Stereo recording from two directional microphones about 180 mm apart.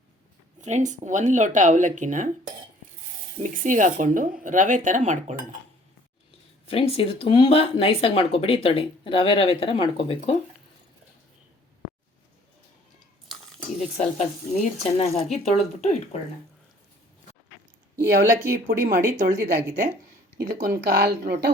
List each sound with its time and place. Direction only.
0.6 s speech: 40° right (ahead or behind)
3.4 s speech: 45° right (ahead or behind)
6.7 s speech: 30° left (ahead or behind)
13.7 s speech: 40° left (ahead or behind)
18.4 s speech: 55° right (ahead or behind)
20.4 s speech: 15° right (ahead or behind)
20.9 s speech: 65° right (ahead or behind)